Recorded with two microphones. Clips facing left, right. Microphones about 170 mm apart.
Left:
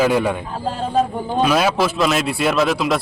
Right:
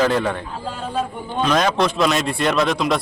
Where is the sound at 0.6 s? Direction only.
35° left (ahead or behind).